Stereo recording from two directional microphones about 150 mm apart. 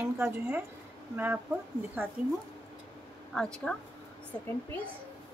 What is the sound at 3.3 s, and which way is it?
A woman's voice, 5° left (ahead or behind).